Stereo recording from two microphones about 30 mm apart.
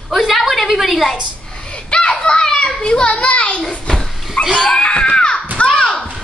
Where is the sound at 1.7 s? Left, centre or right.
Left.